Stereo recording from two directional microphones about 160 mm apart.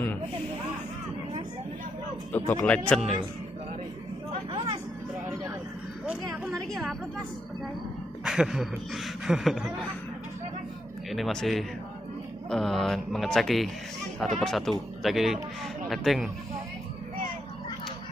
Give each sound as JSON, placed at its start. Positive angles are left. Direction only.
{"t": 2.3, "sound": "a man's voice", "side_deg": 10}
{"t": 4.5, "sound": "vehicle", "side_deg": -30}
{"t": 6.0, "sound": "a sound", "side_deg": 0}
{"t": 8.2, "sound": "speech", "side_deg": -5}
{"t": 11.1, "sound": "speech", "side_deg": 0}